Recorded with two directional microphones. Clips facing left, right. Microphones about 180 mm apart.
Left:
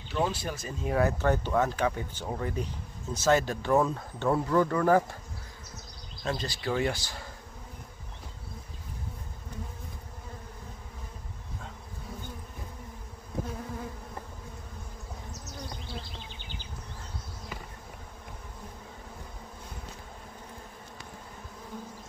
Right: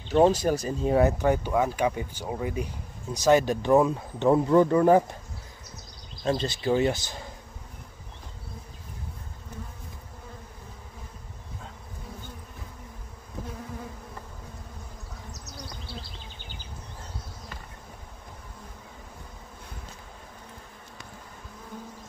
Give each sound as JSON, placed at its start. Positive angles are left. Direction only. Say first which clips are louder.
{"t": 0.1, "sound": "speech", "louder": "right 10 dB", "side_deg": -40}
{"t": 0.9, "sound": "speech", "louder": "right 3 dB", "side_deg": -20}
{"t": 6.2, "sound": "speech", "louder": "right 6 dB", "side_deg": -25}